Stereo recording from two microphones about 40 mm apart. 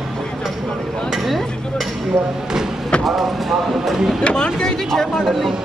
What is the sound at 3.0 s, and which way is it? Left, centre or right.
Speech, centre.